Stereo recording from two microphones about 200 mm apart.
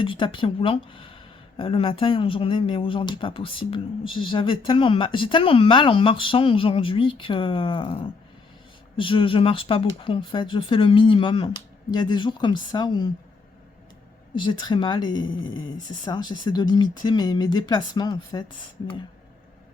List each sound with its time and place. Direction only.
0.0 s speech: 25° left (ahead or behind)
14.4 s speech: 25° left (ahead or behind)